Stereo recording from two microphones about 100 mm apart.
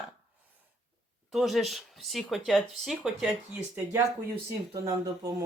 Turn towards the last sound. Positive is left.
turn(degrees=-35)  # may be behind; listen again after turning